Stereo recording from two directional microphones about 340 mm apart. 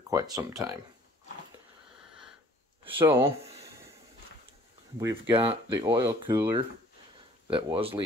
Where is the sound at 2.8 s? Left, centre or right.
Centre.